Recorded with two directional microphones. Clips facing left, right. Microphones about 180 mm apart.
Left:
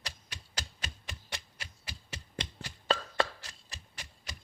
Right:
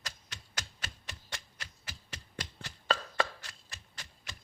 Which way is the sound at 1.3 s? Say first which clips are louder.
Left 1 dB; 15° left (ahead or behind).